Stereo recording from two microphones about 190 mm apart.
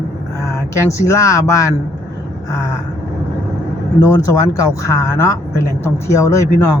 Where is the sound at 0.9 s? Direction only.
15° left (ahead or behind).